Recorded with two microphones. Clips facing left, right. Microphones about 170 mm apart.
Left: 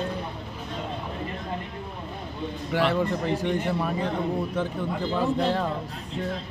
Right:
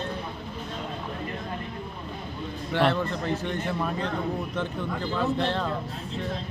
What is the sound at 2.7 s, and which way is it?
Speech, 10° left (ahead or behind).